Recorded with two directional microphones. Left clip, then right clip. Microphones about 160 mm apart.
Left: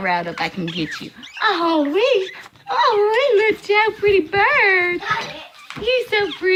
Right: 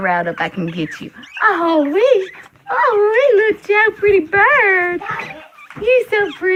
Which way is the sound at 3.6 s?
20° right (ahead or behind).